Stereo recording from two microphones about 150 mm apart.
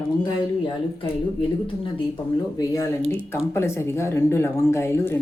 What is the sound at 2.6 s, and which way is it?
Speech, 20° left (ahead or behind).